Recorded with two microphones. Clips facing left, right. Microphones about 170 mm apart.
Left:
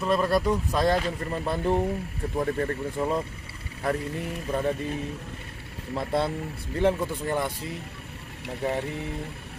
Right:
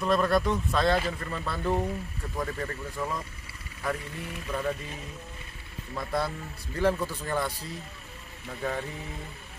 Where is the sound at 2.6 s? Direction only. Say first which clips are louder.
Left 6 dB; 30° left (ahead or behind).